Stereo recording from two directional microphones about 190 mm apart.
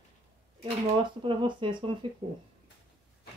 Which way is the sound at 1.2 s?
25° right (ahead or behind).